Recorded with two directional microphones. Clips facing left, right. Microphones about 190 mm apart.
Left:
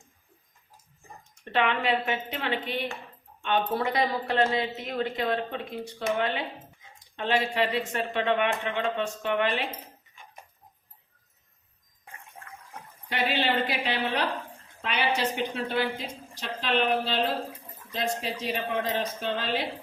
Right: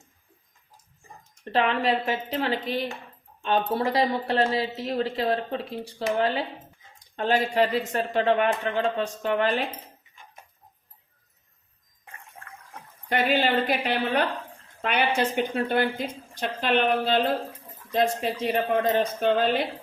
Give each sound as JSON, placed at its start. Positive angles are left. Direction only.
{"t": 1.5, "sound": "speech", "side_deg": -35}
{"t": 13.1, "sound": "a woman's voice", "side_deg": -50}